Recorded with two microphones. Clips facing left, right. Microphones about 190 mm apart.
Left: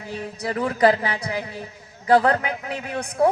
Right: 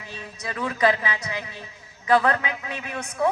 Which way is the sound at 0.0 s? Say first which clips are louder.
Left 7 dB; 35° left (ahead or behind).